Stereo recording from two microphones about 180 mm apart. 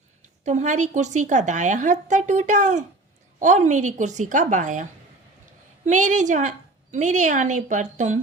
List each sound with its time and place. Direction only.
0.2 s a woman's voice: 40° right (ahead or behind)